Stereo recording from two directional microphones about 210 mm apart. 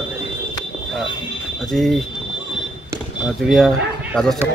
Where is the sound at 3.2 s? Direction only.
Centre (ahead or behind).